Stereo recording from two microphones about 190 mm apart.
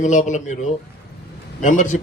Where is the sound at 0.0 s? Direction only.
40° left (ahead or behind).